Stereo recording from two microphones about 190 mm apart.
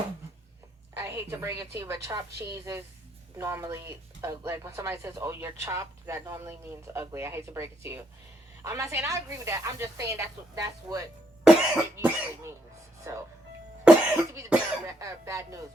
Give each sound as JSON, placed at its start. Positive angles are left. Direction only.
{"t": 0.9, "sound": "a woman's voice", "side_deg": -15}
{"t": 13.9, "sound": "cough", "side_deg": -5}
{"t": 14.3, "sound": "speech", "side_deg": -15}